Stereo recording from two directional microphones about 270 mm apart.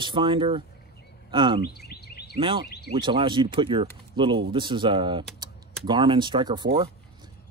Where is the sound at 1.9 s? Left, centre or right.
Left.